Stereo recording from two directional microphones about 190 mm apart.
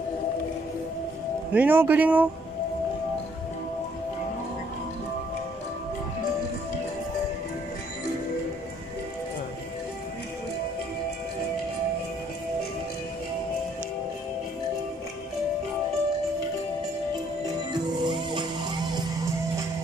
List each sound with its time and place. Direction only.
1.5 s a man's voice: 10° right (ahead or behind)
17.9 s music: 25° right (ahead or behind)